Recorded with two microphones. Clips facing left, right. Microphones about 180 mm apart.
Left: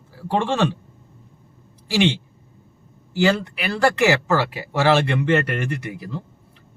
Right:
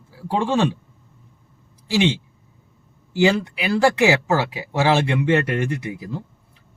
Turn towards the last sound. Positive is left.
turn(degrees=-15)  # may be behind; listen again after turning